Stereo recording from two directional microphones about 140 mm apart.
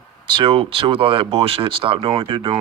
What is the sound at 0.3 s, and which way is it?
Speech, 35° right (ahead or behind).